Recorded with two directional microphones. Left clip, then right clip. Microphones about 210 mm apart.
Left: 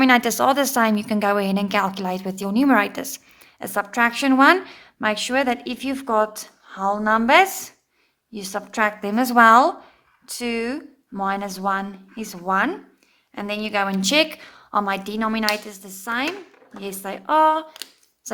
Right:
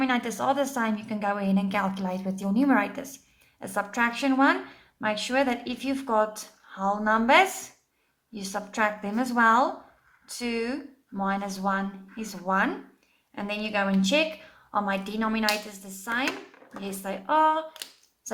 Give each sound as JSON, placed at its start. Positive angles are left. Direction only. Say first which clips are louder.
{"t": 0.0, "sound": "a woman's voice", "louder": "left 10 dB", "side_deg": 40}